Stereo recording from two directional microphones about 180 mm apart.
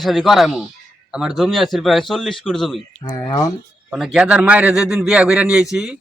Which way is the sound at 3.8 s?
5° right (ahead or behind).